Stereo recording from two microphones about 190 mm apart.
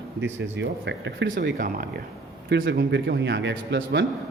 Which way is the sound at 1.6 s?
45° right (ahead or behind).